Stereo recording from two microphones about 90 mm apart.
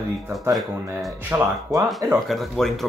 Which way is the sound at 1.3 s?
25° right (ahead or behind).